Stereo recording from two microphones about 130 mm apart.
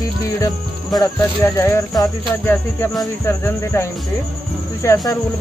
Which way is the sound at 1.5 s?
20° left (ahead or behind).